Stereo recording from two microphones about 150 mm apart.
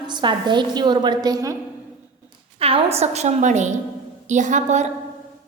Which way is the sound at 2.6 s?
40° right (ahead or behind).